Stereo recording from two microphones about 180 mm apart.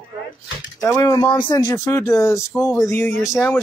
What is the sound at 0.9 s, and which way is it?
Speech, 20° left (ahead or behind).